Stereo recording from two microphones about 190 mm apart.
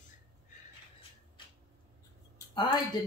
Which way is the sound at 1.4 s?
25° left (ahead or behind).